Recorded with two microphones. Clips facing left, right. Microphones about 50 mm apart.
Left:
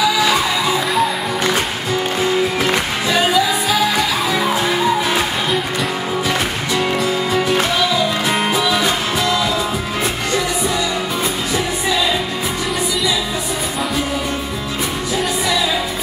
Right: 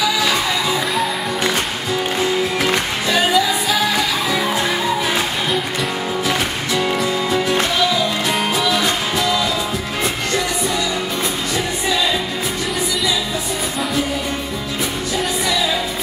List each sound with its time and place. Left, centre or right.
0.0 s music: centre